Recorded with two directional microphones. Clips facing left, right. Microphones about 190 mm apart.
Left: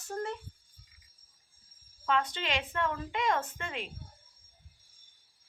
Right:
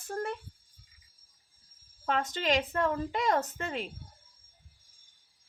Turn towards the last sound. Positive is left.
turn(degrees=-40)  # may be behind; listen again after turning